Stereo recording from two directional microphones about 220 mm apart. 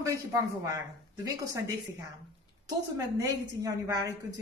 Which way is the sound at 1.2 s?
15° right (ahead or behind).